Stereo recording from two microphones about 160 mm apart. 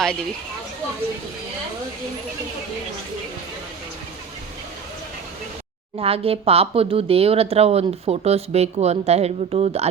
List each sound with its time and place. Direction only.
6.0 s speech: 35° right (ahead or behind)